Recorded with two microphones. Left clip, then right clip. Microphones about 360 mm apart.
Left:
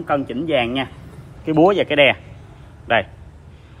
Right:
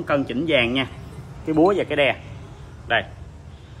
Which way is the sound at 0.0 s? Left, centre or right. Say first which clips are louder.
Left 1 dB; centre.